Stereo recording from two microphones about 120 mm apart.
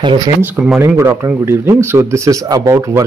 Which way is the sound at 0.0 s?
40° right (ahead or behind).